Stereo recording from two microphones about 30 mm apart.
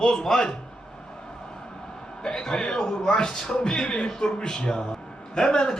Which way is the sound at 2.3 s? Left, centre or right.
Left.